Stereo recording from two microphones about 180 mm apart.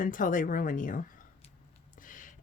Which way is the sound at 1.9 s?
50° left (ahead or behind).